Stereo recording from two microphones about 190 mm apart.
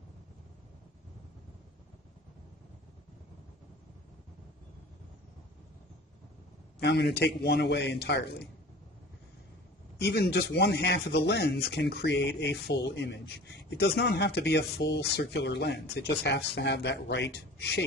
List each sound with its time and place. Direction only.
6.8 s speech: 60° left (ahead or behind)
9.9 s speech: 60° left (ahead or behind)